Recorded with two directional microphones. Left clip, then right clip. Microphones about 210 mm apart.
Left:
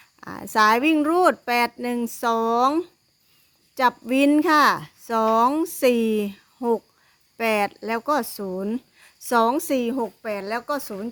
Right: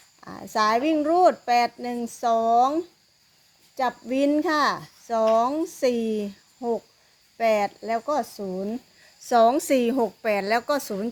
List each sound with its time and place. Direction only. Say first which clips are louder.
0.2 s speech: left 4 dB; 30° left (ahead or behind)
9.2 s a woman's voice: right 1 dB; 25° left (ahead or behind); by 11.1 s centre (ahead or behind)